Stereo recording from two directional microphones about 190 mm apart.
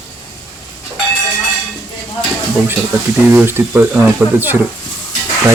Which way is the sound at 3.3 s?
10° right (ahead or behind).